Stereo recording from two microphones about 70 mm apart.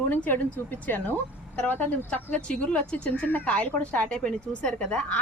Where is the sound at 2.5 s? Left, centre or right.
Centre.